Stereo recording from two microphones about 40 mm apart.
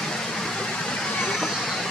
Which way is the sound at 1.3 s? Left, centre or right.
Centre.